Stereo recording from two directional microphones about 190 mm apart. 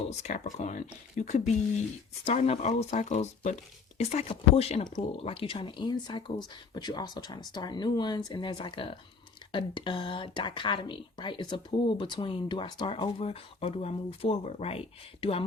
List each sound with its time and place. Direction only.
0.0 s speech: 35° left (ahead or behind)